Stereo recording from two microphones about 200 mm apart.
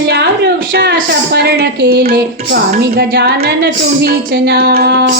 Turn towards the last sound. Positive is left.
turn(degrees=-55)  # may be behind; listen again after turning